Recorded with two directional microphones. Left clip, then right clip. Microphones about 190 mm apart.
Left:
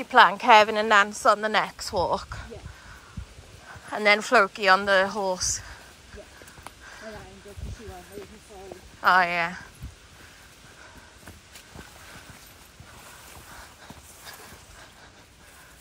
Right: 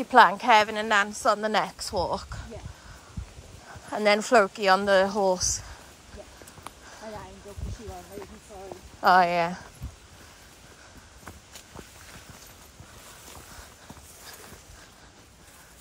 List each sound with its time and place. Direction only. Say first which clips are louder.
0.0 s a woman's voice: even; 15° right (ahead or behind)
3.6 s a woman's voice: left 2 dB; 15° right (ahead or behind)
6.9 s a sound: even; 20° right (ahead or behind)
9.0 s a woman's voice: right 1 dB; 20° right (ahead or behind)